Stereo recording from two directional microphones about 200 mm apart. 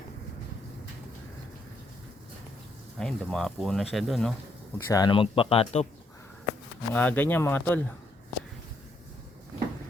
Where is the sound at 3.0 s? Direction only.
5° left (ahead or behind).